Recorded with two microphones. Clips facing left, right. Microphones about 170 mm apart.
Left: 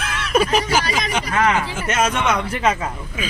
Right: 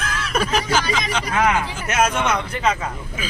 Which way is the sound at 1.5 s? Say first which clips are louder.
Left 1 dB; 5° right (ahead or behind).